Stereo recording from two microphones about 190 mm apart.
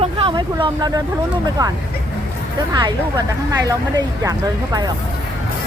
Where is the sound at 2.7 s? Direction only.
20° right (ahead or behind).